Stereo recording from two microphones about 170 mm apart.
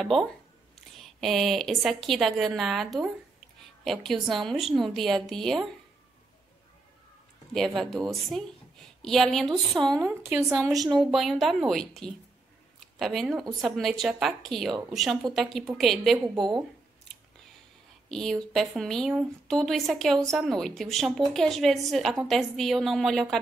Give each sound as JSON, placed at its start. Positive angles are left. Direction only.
{"t": 0.9, "sound": "a woman's voice", "side_deg": 0}
{"t": 7.5, "sound": "a woman's voice", "side_deg": 0}
{"t": 10.3, "sound": "a woman's voice", "side_deg": -15}
{"t": 11.0, "sound": "a woman's voice", "side_deg": 0}
{"t": 16.3, "sound": "speech", "side_deg": -25}
{"t": 18.0, "sound": "a woman's voice", "side_deg": 0}